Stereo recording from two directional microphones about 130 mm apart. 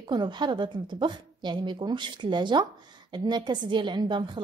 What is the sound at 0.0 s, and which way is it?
A woman's voice, 35° right (ahead or behind).